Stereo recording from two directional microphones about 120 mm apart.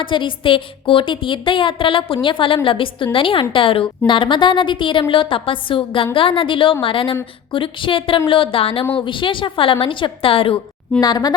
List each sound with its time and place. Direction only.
0.0 s a woman's voice: 45° left (ahead or behind)
11.0 s speech: 35° left (ahead or behind)